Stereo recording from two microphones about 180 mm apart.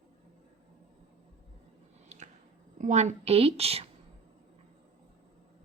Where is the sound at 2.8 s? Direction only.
40° right (ahead or behind).